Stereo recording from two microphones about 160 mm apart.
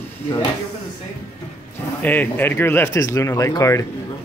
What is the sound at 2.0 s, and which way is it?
Speech, 10° left (ahead or behind).